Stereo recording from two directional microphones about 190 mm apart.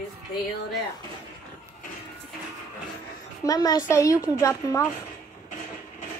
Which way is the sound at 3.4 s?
20° left (ahead or behind).